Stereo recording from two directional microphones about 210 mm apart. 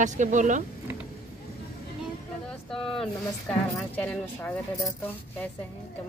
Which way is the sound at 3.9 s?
10° left (ahead or behind).